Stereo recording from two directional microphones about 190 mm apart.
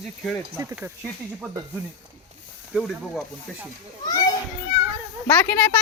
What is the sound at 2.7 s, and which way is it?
Speech, centre (ahead or behind).